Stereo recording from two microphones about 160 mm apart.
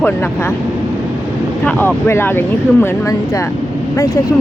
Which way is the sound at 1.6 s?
10° left (ahead or behind).